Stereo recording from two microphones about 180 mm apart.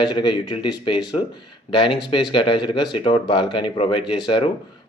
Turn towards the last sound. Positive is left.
turn(degrees=25)  # may be behind; listen again after turning